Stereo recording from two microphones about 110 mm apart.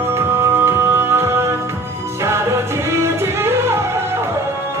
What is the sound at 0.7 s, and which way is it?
Music, 20° right (ahead or behind).